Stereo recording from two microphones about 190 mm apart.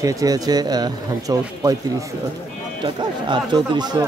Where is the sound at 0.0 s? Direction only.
20° right (ahead or behind).